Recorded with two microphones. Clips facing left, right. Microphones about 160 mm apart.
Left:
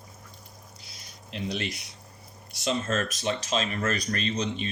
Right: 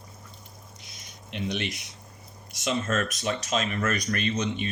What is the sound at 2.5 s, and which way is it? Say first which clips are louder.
Speech: even; 30° left (ahead or behind).